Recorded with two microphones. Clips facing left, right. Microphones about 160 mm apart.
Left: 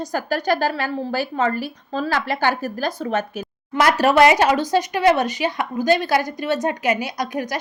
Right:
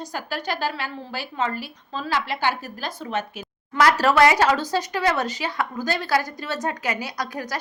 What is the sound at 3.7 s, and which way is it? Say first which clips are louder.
Speech: left 2 dB; 20° left (ahead or behind).